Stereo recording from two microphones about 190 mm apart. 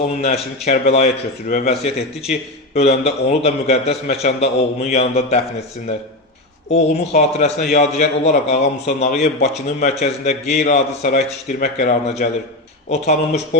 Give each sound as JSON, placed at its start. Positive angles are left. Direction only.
{"t": 0.2, "sound": "a man's voice", "side_deg": 35}
{"t": 6.7, "sound": "a man's voice", "side_deg": 40}